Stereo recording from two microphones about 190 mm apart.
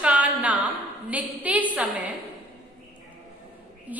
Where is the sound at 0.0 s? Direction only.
5° right (ahead or behind).